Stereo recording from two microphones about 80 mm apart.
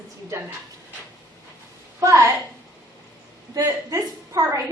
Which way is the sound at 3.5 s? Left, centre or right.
Right.